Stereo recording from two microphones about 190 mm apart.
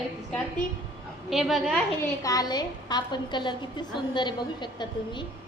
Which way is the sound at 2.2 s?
20° left (ahead or behind).